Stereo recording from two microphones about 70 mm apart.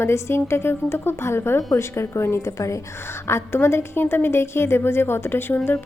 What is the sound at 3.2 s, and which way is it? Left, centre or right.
A woman's voice, left.